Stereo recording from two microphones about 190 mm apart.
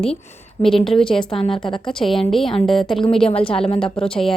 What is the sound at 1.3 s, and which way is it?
Speech, 30° left (ahead or behind).